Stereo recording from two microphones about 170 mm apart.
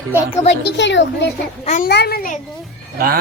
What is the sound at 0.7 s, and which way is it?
Speech, 90° left.